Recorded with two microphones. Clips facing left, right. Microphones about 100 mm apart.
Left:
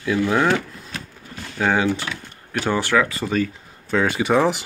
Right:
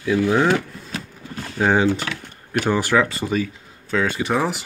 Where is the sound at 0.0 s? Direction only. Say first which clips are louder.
Right 1 dB; 15° right (ahead or behind).